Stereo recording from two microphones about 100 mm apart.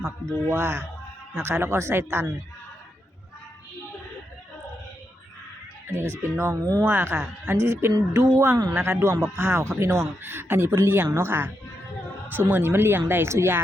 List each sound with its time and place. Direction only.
0.4 s speech: 25° right (ahead or behind)
5.9 s speech: 25° right (ahead or behind)